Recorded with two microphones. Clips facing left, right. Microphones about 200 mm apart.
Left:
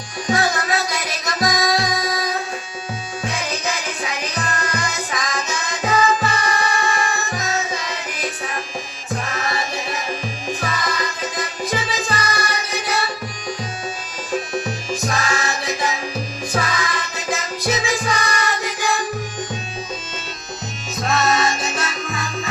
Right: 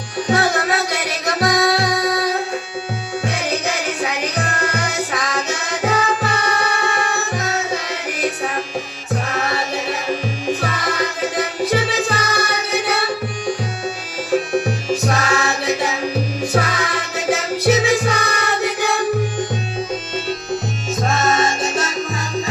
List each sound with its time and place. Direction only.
0.3 s music: 65° right (ahead or behind)
14.3 s music: 65° right (ahead or behind)
21.0 s salsa music: 50° right (ahead or behind)